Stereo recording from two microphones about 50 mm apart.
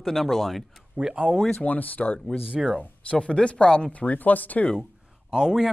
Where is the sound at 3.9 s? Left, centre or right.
Left.